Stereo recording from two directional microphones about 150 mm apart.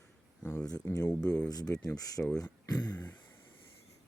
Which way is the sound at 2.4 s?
25° left (ahead or behind).